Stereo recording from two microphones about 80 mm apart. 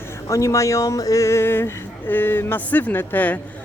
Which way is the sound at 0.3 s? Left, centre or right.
Left.